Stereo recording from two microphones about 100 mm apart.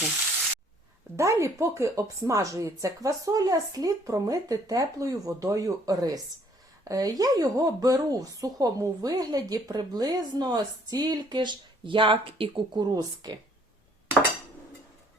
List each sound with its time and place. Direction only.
1.1 s a woman's voice: 30° right (ahead or behind)